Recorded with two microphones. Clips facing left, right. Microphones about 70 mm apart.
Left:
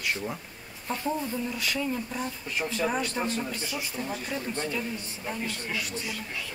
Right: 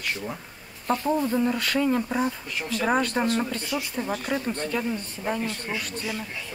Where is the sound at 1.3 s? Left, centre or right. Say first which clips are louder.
Right 7 dB; right.